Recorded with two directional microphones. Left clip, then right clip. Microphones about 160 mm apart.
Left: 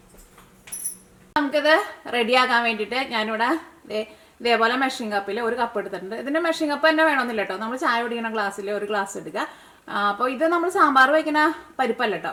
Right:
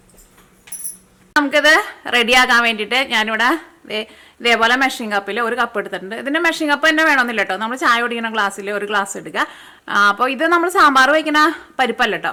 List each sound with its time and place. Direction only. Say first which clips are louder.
1.5 s a woman's voice: right 6 dB; 30° right (ahead or behind)